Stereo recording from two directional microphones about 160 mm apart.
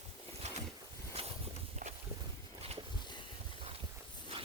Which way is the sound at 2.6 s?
40° right (ahead or behind).